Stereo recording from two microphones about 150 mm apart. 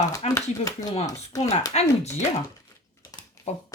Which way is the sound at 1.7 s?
45° left (ahead or behind).